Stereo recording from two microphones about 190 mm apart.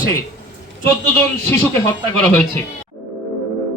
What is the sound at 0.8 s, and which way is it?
A man's voice, 10° left (ahead or behind).